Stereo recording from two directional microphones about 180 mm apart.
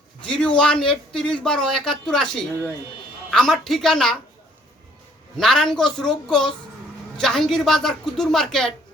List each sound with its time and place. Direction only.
0.2 s a sound: 5° left (ahead or behind)
1.1 s a woman's voice: 5° left (ahead or behind)
5.4 s a woman's voice: centre (ahead or behind)